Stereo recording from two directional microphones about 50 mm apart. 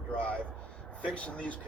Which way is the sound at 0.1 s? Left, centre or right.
Left.